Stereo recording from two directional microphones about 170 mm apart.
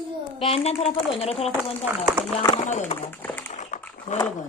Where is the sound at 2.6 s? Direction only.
45° left (ahead or behind).